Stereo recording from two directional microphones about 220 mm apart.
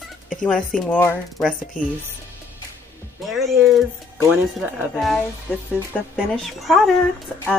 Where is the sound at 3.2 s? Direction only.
Centre (ahead or behind).